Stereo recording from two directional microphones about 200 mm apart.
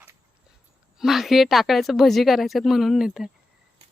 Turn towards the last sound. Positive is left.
turn(degrees=0)  # may be behind; listen again after turning